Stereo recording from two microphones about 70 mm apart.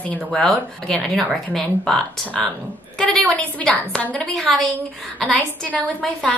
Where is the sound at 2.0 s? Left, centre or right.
Centre.